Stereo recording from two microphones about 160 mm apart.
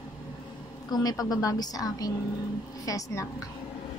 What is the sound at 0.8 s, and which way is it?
A woman's voice, 25° left (ahead or behind).